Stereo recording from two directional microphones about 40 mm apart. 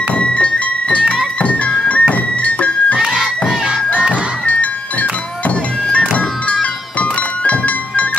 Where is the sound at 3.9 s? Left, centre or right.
Right.